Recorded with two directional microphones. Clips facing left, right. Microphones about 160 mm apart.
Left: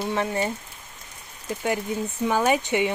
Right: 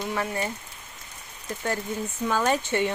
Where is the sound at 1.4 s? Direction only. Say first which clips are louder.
Left 3 dB; 15° left (ahead or behind).